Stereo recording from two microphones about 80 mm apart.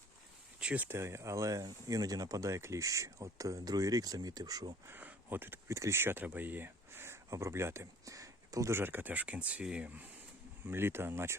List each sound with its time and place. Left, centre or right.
0.6 s a sound: centre
0.9 s speech: right
4.9 s speech: right
8.8 s speech: right
10.7 s speech: right